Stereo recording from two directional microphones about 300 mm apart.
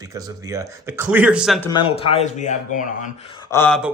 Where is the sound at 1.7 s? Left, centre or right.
Centre.